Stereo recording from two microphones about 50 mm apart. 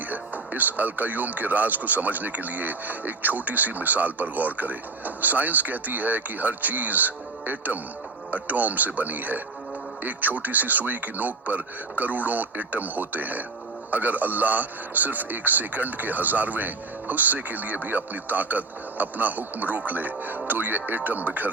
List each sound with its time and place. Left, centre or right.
0.1 s speech: right